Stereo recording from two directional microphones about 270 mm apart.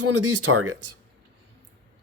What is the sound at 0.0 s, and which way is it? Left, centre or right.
Speech, right.